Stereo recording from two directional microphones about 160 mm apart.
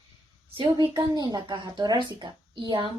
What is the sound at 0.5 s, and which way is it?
A woman's voice, 30° right (ahead or behind).